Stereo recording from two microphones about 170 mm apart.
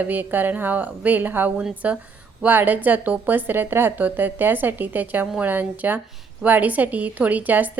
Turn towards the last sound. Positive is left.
turn(degrees=-10)  # may be behind; listen again after turning